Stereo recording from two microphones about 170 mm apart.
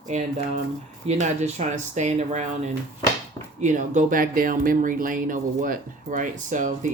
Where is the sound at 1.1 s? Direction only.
40° right (ahead or behind).